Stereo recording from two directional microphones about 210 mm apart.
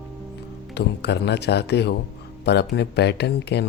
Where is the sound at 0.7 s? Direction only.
55° left (ahead or behind).